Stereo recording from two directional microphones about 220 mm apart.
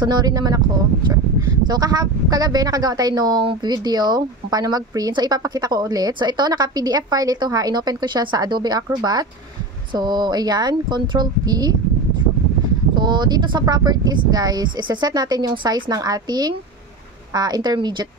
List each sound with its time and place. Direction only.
0.0 s a woman's voice: 20° right (ahead or behind)
1.7 s a woman's voice: 15° right (ahead or behind)
12.9 s speech: 20° right (ahead or behind)